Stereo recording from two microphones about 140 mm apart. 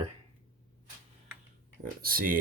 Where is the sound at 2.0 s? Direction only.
90° right.